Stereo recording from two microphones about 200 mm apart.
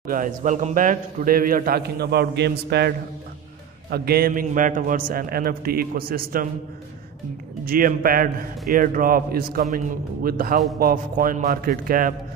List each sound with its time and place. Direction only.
0.0 s a man's voice: 45° right (ahead or behind)
3.9 s a man's voice: 50° right (ahead or behind)
7.6 s a man's voice: 45° right (ahead or behind)